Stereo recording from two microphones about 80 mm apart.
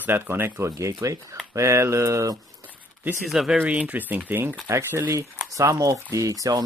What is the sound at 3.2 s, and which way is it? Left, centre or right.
Speech, centre.